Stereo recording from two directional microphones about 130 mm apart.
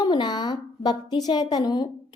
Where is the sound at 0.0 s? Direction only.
35° left (ahead or behind).